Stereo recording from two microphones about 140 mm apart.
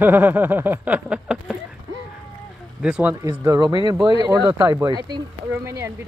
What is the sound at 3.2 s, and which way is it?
Speech, 25° right (ahead or behind).